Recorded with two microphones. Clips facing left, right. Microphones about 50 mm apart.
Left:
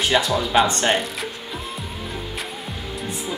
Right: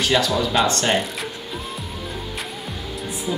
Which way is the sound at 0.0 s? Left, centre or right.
Centre.